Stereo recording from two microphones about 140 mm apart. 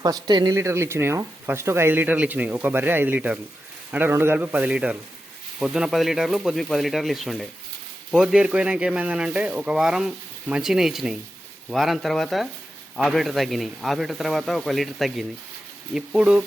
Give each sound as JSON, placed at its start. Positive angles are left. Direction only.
{"t": 0.0, "sound": "speech", "side_deg": -30}